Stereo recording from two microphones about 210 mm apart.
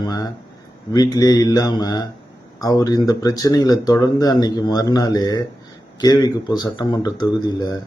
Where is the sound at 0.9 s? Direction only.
20° left (ahead or behind).